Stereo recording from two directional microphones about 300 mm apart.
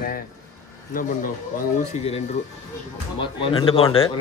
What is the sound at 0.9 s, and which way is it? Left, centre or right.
Speech, left.